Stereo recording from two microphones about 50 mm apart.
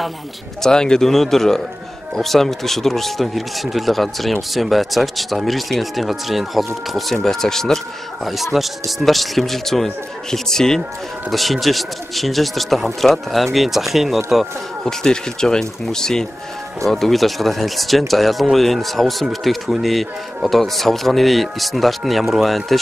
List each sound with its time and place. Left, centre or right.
0.6 s speech: centre
14.9 s speech: centre